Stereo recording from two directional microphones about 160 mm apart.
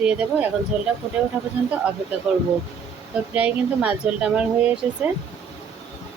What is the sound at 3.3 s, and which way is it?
A woman's voice, 10° right (ahead or behind).